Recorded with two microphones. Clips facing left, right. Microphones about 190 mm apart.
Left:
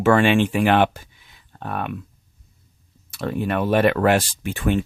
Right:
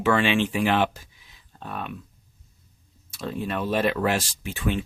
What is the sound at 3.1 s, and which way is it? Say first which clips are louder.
Speech: left 6 dB; 65° left (ahead or behind).